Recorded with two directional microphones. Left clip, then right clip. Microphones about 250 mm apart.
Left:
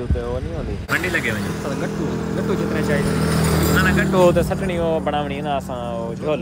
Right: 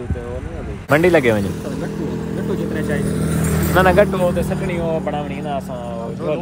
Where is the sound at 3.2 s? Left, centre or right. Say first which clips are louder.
Left 2 dB; left.